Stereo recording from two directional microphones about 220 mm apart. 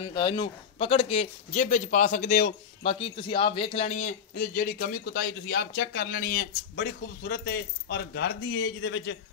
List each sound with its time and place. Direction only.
0.0 s a man's voice: 20° left (ahead or behind); by 9.2 s 55° left (ahead or behind)